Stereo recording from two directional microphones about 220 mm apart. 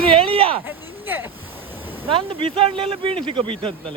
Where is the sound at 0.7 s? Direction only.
10° right (ahead or behind).